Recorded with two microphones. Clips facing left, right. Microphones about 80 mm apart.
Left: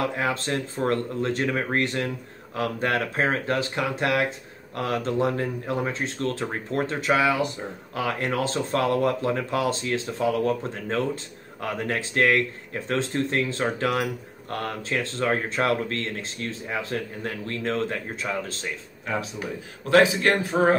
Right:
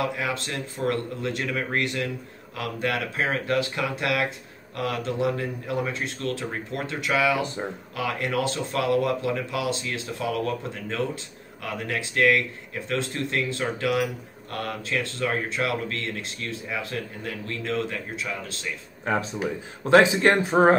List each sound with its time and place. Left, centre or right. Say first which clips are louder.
0.0 s speech: left 2 dB; left
19.8 s speech: right 2 dB; right